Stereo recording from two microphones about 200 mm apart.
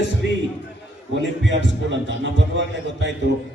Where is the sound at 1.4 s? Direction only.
65° right (ahead or behind).